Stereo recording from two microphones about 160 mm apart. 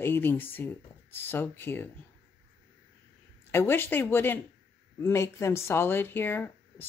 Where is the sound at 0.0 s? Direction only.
15° left (ahead or behind).